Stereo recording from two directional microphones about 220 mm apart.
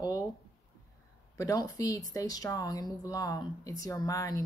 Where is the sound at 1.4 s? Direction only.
15° left (ahead or behind).